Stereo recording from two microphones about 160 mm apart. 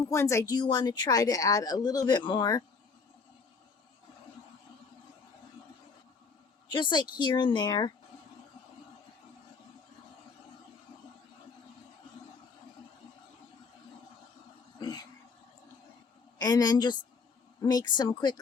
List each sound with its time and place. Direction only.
0.1 s a woman's voice: 15° left (ahead or behind)
6.7 s a woman's voice: 30° left (ahead or behind)
14.8 s a sound: 25° left (ahead or behind)
16.4 s a woman's voice: 25° left (ahead or behind)